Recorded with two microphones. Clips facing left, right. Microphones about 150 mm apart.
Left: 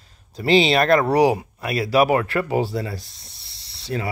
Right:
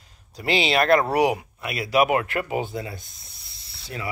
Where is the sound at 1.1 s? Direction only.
30° left (ahead or behind).